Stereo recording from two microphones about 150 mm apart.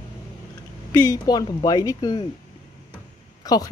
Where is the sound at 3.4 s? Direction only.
25° left (ahead or behind).